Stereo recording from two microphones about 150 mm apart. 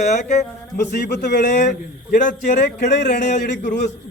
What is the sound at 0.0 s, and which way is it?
Speech, 50° left (ahead or behind).